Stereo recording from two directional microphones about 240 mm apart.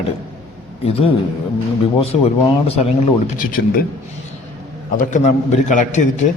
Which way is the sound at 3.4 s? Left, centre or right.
Left.